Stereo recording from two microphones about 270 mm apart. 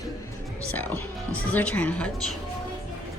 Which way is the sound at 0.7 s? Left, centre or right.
Centre.